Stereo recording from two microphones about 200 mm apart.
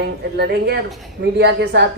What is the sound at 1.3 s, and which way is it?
Speech, 55° right (ahead or behind).